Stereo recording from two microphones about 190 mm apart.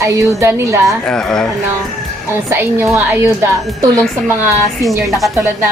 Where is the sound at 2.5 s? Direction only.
15° right (ahead or behind).